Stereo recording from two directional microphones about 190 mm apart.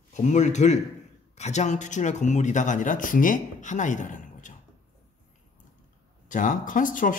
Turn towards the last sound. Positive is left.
turn(degrees=45)  # may be behind; listen again after turning